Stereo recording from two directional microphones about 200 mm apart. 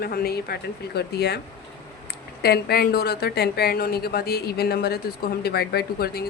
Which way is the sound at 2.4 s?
50° left (ahead or behind).